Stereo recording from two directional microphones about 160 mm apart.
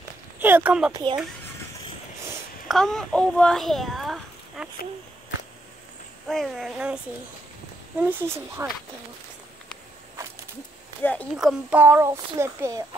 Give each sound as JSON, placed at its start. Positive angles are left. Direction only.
{"t": 0.4, "sound": "speech", "side_deg": -10}
{"t": 0.9, "sound": "speech", "side_deg": -30}
{"t": 2.7, "sound": "a child's voice", "side_deg": 0}
{"t": 6.2, "sound": "a child's voice", "side_deg": 0}
{"t": 8.0, "sound": "speech", "side_deg": -10}
{"t": 11.0, "sound": "speech", "side_deg": 10}
{"t": 11.3, "sound": "speech", "side_deg": -5}